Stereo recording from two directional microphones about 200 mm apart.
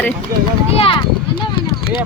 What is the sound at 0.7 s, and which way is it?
Speech, 25° left (ahead or behind).